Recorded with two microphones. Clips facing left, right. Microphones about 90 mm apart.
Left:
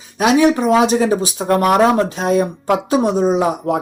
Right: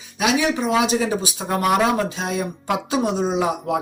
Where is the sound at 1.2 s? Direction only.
55° left (ahead or behind).